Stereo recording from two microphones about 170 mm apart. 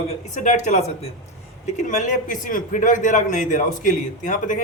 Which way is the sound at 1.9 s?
45° left (ahead or behind).